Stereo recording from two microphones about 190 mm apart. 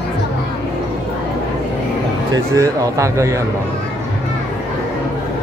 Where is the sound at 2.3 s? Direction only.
15° right (ahead or behind).